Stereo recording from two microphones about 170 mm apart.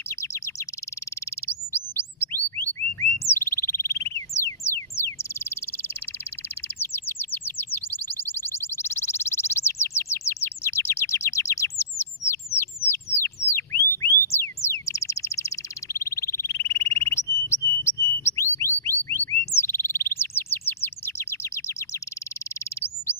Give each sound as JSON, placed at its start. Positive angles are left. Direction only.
{"t": 0.1, "sound": "chirp", "side_deg": 15}
{"t": 1.7, "sound": "bird", "side_deg": 10}
{"t": 4.4, "sound": "a sound", "side_deg": 15}
{"t": 4.9, "sound": "bird", "side_deg": 15}
{"t": 6.8, "sound": "chirp", "side_deg": 15}
{"t": 11.8, "sound": "bird", "side_deg": 15}
{"t": 13.5, "sound": "a sound", "side_deg": 15}
{"t": 18.8, "sound": "bird", "side_deg": 15}